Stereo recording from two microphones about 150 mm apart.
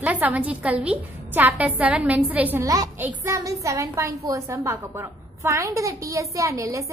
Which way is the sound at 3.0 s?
10° right (ahead or behind).